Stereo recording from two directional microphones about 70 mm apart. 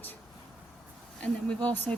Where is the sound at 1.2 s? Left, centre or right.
Centre.